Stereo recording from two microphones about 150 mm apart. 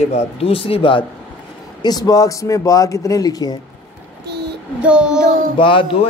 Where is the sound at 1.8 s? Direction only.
25° left (ahead or behind).